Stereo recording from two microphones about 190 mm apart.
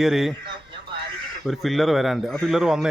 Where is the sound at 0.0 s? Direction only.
Centre (ahead or behind).